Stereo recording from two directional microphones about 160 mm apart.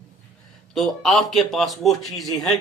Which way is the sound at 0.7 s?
Centre (ahead or behind).